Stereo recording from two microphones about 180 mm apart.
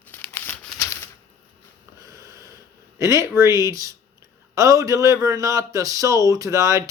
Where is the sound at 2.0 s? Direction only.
20° right (ahead or behind).